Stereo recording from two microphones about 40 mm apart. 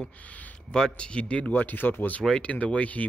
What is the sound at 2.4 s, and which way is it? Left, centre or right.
Speech, left.